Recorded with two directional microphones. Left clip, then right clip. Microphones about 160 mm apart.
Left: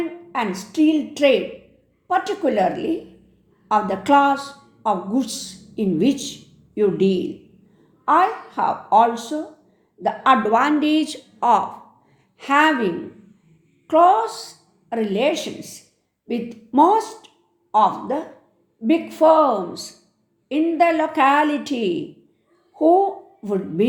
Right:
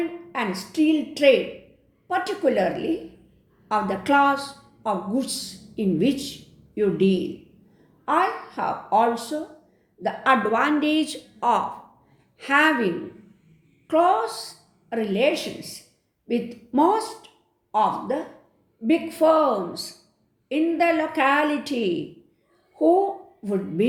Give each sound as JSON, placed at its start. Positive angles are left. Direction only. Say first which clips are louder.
{"t": 0.3, "sound": "a woman's voice", "louder": "left 3 dB", "side_deg": 35}